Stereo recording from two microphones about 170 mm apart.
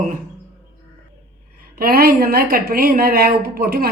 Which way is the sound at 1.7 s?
65° right (ahead or behind).